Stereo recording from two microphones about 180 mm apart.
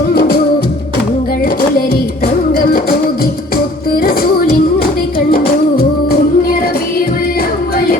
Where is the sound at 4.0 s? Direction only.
55° left (ahead or behind).